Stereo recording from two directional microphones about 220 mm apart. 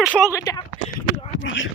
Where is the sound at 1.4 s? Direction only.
60° left (ahead or behind).